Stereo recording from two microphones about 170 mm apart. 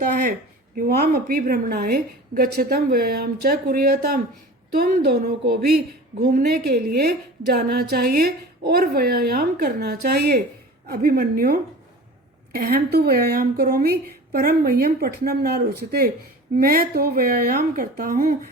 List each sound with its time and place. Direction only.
0.8 s a woman's voice: 60° right (ahead or behind)
12.5 s a woman's voice: 60° right (ahead or behind)